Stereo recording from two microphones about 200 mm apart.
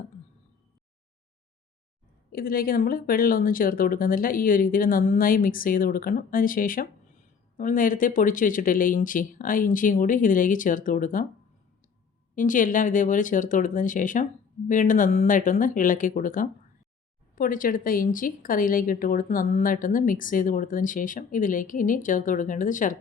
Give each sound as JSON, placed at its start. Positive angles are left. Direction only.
{"t": 2.3, "sound": "a woman's voice", "side_deg": 45}
{"t": 12.3, "sound": "a woman's voice", "side_deg": 40}